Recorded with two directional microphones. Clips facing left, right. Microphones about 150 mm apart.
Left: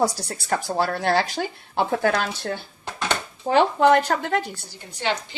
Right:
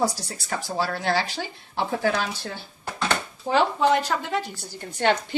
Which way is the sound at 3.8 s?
60° left (ahead or behind).